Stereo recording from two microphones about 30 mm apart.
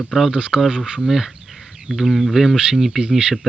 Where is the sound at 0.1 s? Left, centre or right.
Centre.